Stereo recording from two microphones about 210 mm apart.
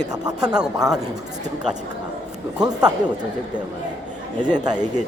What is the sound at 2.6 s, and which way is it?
Speech, 20° right (ahead or behind).